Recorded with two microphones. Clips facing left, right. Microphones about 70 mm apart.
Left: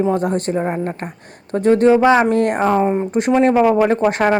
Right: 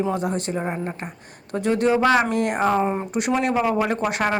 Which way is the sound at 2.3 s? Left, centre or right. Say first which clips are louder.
Left 6 dB; left.